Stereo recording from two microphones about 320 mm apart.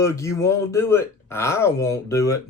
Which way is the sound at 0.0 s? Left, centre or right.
Centre.